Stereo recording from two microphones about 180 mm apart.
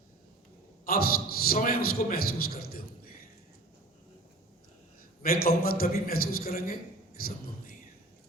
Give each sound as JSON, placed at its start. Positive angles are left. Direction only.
{"t": 0.9, "sound": "a man's voice", "side_deg": 55}
{"t": 5.2, "sound": "a man's voice", "side_deg": 55}